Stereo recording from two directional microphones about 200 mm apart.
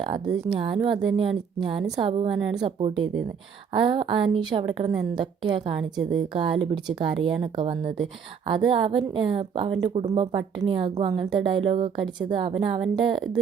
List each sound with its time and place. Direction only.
0.5 s a woman's voice: 25° right (ahead or behind)
6.0 s a woman's voice: centre (ahead or behind)
6.3 s a woman's voice: 25° right (ahead or behind)